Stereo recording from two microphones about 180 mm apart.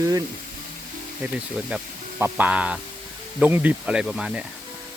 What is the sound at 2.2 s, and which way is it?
Speech, 10° right (ahead or behind).